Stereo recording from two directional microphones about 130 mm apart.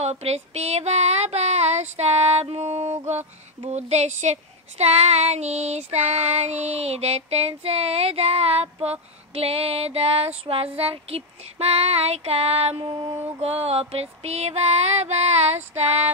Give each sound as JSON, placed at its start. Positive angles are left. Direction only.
{"t": 0.0, "sound": "speech", "side_deg": -50}
{"t": 9.3, "sound": "female singing", "side_deg": -50}